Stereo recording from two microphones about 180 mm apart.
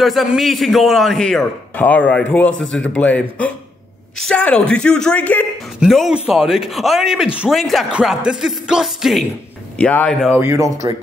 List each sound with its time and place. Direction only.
0.0 s a man's voice: centre (ahead or behind)
10.3 s speech: 15° right (ahead or behind)